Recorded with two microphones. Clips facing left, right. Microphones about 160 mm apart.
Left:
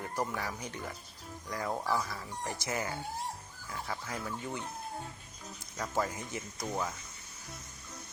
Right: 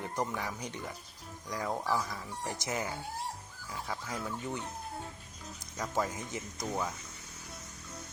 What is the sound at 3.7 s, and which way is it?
Speech, 5° right (ahead or behind).